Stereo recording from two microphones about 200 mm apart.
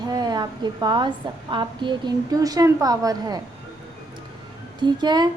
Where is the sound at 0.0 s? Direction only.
20° right (ahead or behind).